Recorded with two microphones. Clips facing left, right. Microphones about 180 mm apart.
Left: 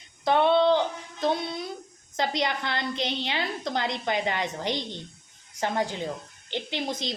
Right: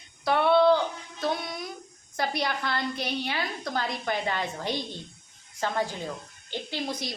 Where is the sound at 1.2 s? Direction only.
25° left (ahead or behind).